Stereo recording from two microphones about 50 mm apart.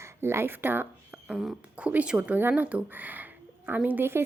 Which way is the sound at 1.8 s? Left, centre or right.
Right.